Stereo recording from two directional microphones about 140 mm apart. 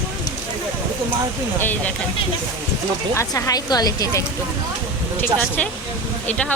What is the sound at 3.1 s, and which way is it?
Speech, 25° left (ahead or behind).